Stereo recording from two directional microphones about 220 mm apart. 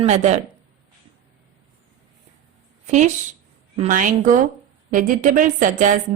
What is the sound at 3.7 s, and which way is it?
A woman's voice, 30° right (ahead or behind).